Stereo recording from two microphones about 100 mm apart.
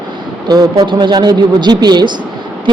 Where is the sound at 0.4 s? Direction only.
45° right (ahead or behind).